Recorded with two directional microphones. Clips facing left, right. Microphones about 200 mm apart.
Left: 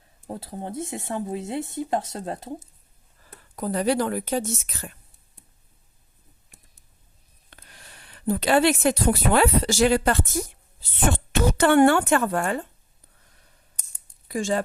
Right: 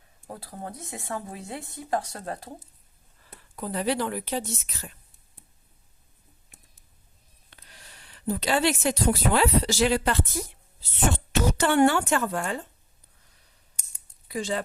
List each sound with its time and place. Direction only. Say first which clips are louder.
0.3 s speech: left 5 dB; 25° left (ahead or behind)
3.5 s speech: left 4 dB; 45° left (ahead or behind)
7.5 s speech: left 3 dB; 55° left (ahead or behind)
14.3 s speech: left 4 dB; 45° left (ahead or behind)